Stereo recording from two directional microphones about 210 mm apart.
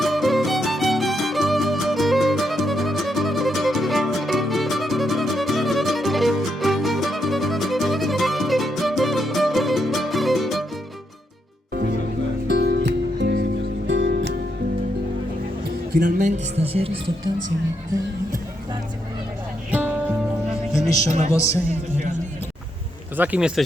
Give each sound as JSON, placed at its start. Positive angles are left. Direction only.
{"t": 0.0, "sound": "music", "side_deg": 0}
{"t": 11.7, "sound": "music", "side_deg": -45}
{"t": 16.0, "sound": "music", "side_deg": -35}
{"t": 19.7, "sound": "music", "side_deg": -5}
{"t": 21.1, "sound": "speech", "side_deg": -30}
{"t": 21.7, "sound": "music", "side_deg": -35}
{"t": 23.1, "sound": "speech", "side_deg": -10}